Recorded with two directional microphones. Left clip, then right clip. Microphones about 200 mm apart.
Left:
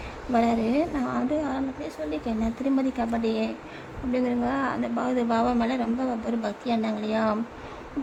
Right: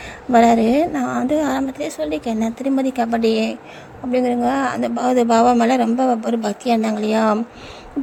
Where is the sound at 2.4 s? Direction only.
20° right (ahead or behind).